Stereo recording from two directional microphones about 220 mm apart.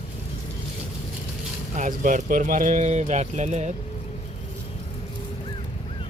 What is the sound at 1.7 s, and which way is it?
Speech, 35° right (ahead or behind).